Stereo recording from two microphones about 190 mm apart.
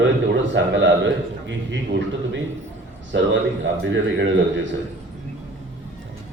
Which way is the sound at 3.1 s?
75° right (ahead or behind).